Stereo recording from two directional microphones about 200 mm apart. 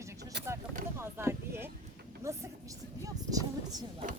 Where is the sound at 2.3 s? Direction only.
15° right (ahead or behind).